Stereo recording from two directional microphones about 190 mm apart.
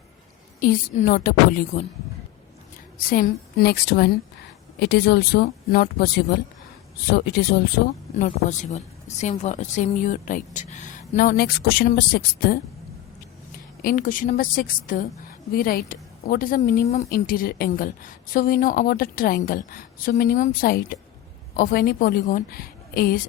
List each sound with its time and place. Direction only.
0.6 s a woman's voice: 45° left (ahead or behind)
3.1 s speech: 50° left (ahead or behind)
8.2 s a woman's voice: 40° left (ahead or behind)
13.8 s a woman's voice: 45° left (ahead or behind)
17.1 s a woman's voice: 50° left (ahead or behind)